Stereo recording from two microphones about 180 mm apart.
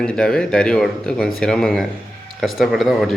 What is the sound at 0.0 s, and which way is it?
A man's voice, 5° left (ahead or behind).